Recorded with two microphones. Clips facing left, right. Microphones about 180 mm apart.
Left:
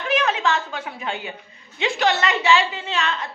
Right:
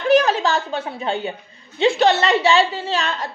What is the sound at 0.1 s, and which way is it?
A woman's voice, 35° right (ahead or behind).